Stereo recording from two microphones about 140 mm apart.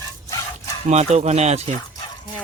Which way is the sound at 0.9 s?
55° right (ahead or behind).